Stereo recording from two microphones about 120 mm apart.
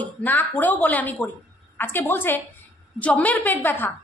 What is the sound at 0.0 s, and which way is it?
A woman's voice, 15° left (ahead or behind).